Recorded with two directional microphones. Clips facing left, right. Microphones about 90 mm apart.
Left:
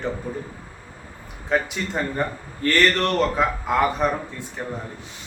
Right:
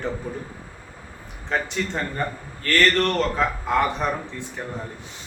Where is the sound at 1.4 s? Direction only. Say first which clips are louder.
Left 3 dB; 5° left (ahead or behind).